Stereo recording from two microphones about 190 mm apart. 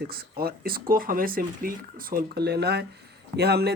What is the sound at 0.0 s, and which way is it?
Speech, 55° right (ahead or behind).